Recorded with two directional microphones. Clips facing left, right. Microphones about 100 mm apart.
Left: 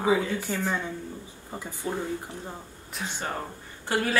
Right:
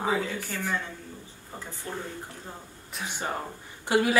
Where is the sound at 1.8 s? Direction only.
10° left (ahead or behind).